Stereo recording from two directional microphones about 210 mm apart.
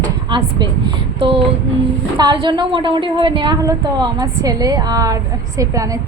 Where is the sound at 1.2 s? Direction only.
25° right (ahead or behind).